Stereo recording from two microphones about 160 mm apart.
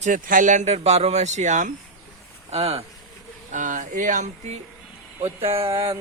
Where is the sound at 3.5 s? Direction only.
50° right (ahead or behind).